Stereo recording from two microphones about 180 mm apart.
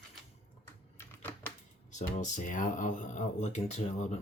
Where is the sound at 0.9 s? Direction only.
10° left (ahead or behind).